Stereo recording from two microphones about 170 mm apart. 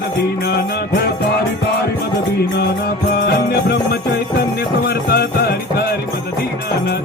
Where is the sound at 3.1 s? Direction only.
70° left (ahead or behind).